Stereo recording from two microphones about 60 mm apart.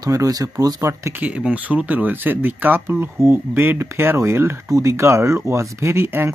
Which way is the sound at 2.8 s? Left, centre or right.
Right.